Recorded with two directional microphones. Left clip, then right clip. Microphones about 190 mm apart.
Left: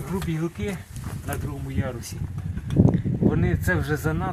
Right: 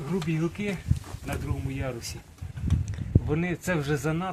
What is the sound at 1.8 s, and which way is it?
Speech, 15° right (ahead or behind).